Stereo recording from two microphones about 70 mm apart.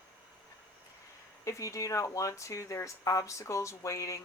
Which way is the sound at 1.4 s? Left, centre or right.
Left.